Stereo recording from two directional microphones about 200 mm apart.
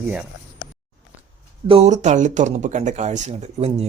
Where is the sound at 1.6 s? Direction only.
30° right (ahead or behind).